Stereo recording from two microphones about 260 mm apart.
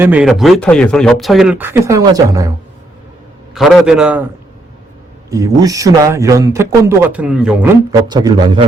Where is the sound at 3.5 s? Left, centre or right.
Centre.